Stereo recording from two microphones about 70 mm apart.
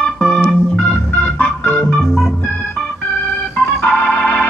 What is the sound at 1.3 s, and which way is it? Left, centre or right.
Organ, left.